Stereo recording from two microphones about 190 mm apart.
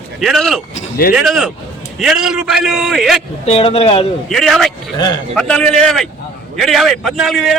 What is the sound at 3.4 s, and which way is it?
Speech, 30° left (ahead or behind).